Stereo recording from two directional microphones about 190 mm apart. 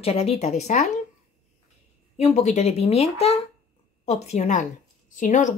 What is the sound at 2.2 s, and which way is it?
Speech, 35° left (ahead or behind).